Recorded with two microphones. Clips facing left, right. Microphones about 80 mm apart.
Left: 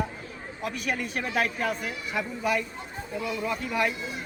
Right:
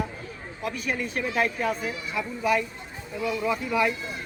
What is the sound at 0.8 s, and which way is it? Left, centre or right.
Speech, left.